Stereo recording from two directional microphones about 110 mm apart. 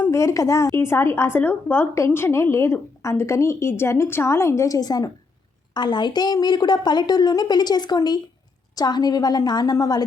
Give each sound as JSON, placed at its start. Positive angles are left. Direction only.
{"t": 0.1, "sound": "a woman's voice", "side_deg": 30}